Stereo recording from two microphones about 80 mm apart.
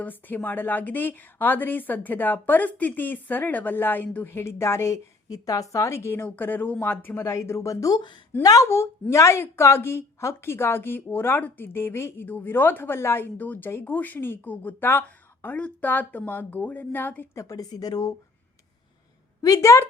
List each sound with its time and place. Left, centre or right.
0.0 s a woman's voice: left
5.3 s a woman's voice: left
6.2 s a woman's voice: left
7.3 s a woman's voice: left
17.3 s speech: left
19.4 s a woman's voice: left